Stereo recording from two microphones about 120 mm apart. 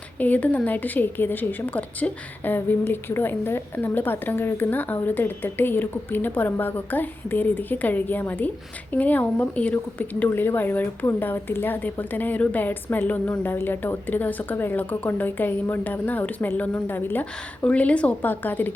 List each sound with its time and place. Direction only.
0.2 s speech: 15° left (ahead or behind)